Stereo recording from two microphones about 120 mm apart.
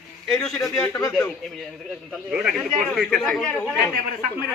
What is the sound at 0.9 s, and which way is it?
Speech, 20° left (ahead or behind).